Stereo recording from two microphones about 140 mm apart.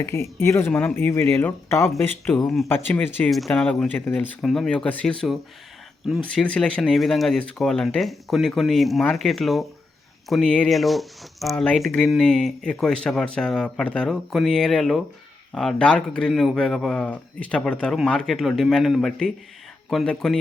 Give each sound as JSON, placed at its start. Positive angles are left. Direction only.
{"t": 0.0, "sound": "speech", "side_deg": 20}
{"t": 0.7, "sound": "speech", "side_deg": 5}
{"t": 0.9, "sound": "speech", "side_deg": 20}
{"t": 3.2, "sound": "speech", "side_deg": 0}